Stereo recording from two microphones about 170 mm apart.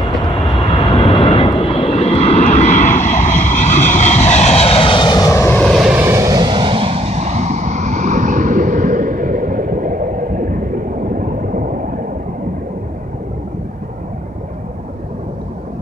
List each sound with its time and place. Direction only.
0.7 s vehicle: 35° left (ahead or behind); by 5.9 s centre (ahead or behind)
5.9 s vehicle: 15° right (ahead or behind); by 10.6 s 55° right (ahead or behind)
11.1 s a sound: 55° right (ahead or behind)